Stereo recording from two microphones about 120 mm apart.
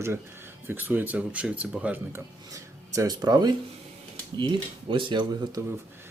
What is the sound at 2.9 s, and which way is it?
Speech, 30° right (ahead or behind).